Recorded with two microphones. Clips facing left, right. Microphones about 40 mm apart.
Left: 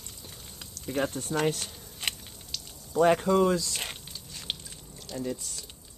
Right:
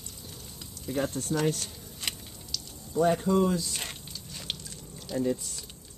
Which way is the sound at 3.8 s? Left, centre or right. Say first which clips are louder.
Left 1 dB; centre.